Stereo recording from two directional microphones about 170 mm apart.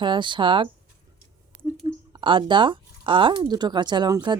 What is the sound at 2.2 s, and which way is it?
Speech, 30° right (ahead or behind).